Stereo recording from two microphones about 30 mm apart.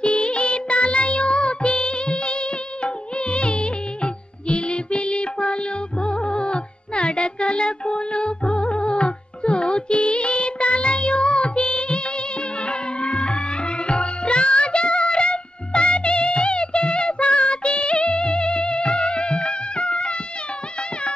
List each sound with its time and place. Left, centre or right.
0.0 s music: left